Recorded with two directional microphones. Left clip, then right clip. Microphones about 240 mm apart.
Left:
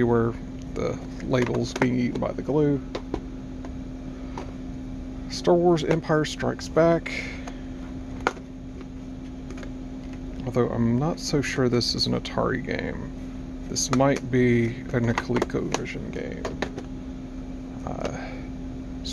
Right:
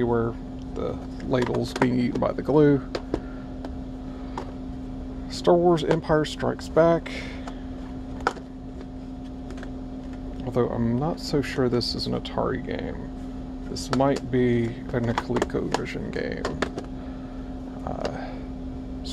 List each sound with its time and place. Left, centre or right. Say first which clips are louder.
0.0 s speech: left 2 dB; left
1.4 s speech: right 1 dB; centre
5.4 s speech: right 1 dB; centre
10.4 s speech: even; centre
13.9 s speech: even; centre
15.7 s speech: right 2 dB; centre
17.8 s a sound: right 1 dB; centre